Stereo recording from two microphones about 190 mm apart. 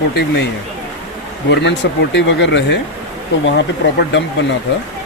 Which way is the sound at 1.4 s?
65° left (ahead or behind).